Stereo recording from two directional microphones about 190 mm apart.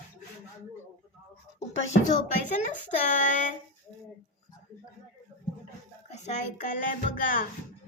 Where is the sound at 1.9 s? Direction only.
40° left (ahead or behind).